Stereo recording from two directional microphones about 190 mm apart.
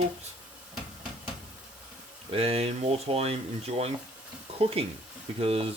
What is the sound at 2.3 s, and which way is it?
Speech, 30° right (ahead or behind).